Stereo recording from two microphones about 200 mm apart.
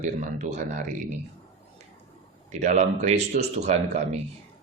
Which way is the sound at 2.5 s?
35° right (ahead or behind).